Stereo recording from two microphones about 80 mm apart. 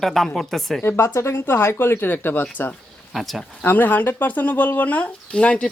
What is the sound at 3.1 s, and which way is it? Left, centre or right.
Speech, centre.